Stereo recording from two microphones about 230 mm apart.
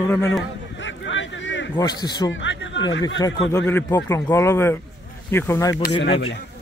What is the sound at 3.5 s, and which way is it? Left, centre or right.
A man's voice, centre.